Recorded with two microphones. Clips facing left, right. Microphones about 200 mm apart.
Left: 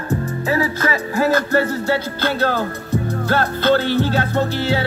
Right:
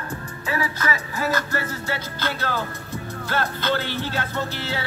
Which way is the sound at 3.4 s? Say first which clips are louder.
Left 7 dB; 55° left (ahead or behind).